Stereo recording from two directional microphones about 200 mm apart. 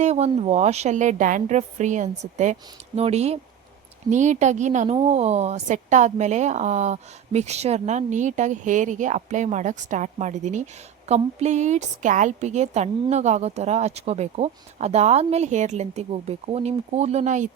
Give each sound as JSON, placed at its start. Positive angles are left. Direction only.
{"t": 0.0, "sound": "a woman's voice", "side_deg": -35}